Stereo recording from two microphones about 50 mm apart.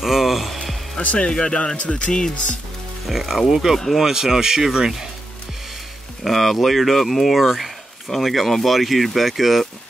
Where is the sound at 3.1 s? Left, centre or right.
Centre.